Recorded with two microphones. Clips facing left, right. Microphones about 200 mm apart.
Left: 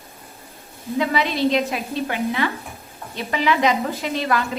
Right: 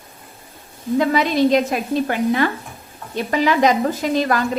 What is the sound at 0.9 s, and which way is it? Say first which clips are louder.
A woman's voice: right 5 dB; 45° right (ahead or behind).